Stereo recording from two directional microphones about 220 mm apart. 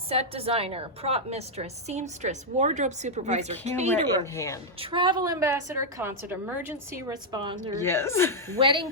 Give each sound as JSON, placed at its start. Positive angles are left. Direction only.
{"t": 0.1, "sound": "a woman's voice", "side_deg": -25}
{"t": 4.4, "sound": "speech", "side_deg": 15}
{"t": 4.8, "sound": "a woman's voice", "side_deg": -20}
{"t": 7.8, "sound": "speech", "side_deg": 10}
{"t": 8.5, "sound": "a woman's voice", "side_deg": -20}